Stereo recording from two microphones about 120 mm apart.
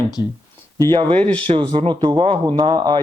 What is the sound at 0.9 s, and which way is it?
Speech, 50° right (ahead or behind).